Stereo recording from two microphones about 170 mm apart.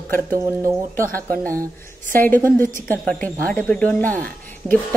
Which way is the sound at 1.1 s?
10° left (ahead or behind).